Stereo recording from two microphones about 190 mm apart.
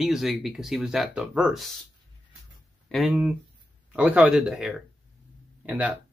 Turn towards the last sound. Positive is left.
turn(degrees=-10)  # may be behind; listen again after turning